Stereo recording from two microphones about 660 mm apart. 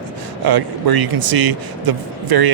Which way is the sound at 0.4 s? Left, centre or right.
Right.